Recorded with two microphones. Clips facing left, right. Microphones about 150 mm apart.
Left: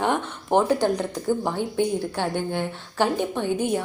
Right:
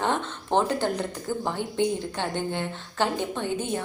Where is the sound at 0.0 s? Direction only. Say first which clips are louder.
Left 3 dB; 15° left (ahead or behind).